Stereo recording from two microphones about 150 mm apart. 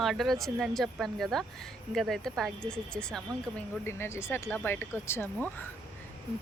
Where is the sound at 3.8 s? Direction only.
15° left (ahead or behind).